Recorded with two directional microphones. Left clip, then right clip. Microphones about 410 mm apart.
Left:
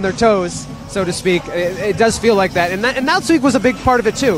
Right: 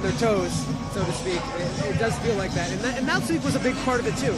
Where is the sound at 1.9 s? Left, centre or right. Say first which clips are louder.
Left 13 dB; left.